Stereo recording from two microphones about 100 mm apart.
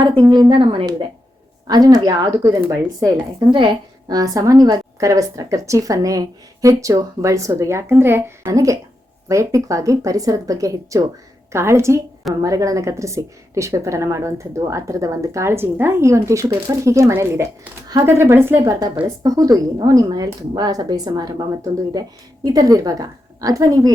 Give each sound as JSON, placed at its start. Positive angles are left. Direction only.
{"t": 0.0, "sound": "a woman's voice", "side_deg": -45}
{"t": 1.6, "sound": "a woman's voice", "side_deg": -40}
{"t": 4.1, "sound": "a woman's voice", "side_deg": -35}
{"t": 8.4, "sound": "a woman's voice", "side_deg": -35}
{"t": 18.6, "sound": "a woman's voice", "side_deg": -35}